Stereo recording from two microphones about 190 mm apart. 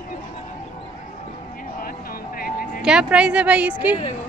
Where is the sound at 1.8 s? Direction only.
50° left (ahead or behind).